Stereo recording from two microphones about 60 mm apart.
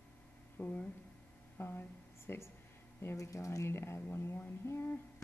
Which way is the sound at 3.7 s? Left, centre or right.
Left.